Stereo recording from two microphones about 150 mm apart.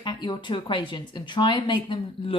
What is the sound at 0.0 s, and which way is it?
Speech, 30° left (ahead or behind).